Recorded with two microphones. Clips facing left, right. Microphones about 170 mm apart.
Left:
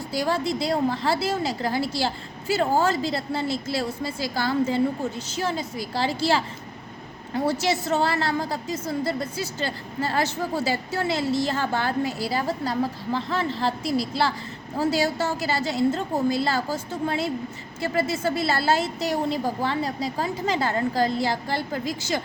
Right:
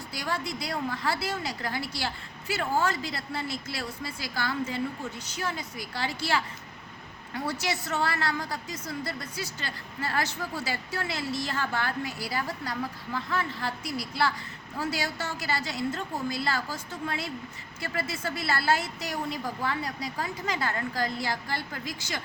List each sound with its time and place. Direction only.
0.1 s a woman's voice: 25° left (ahead or behind)
7.6 s a woman's voice: 25° left (ahead or behind)